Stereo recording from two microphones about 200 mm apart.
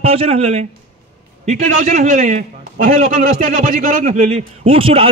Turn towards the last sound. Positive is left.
turn(degrees=-30)  # may be behind; listen again after turning